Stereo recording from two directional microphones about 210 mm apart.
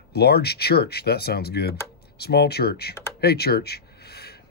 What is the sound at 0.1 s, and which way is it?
Speech, 50° left (ahead or behind).